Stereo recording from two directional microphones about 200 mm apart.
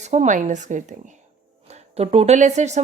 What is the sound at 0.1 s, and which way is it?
A woman's voice, 35° right (ahead or behind).